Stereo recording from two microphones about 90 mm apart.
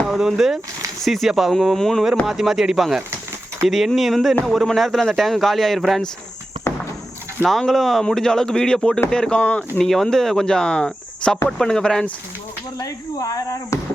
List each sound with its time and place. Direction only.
0.1 s speech: 5° right (ahead or behind)
7.4 s speech: centre (ahead or behind)
9.7 s speech: 5° left (ahead or behind)
12.8 s speech: 40° left (ahead or behind)